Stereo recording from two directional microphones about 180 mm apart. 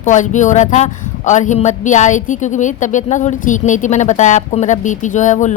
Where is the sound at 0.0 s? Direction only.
45° left (ahead or behind).